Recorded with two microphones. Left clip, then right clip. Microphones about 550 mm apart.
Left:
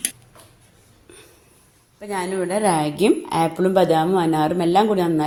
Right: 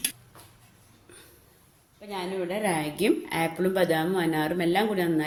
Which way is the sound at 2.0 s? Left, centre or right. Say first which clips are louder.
Left 8 dB; right.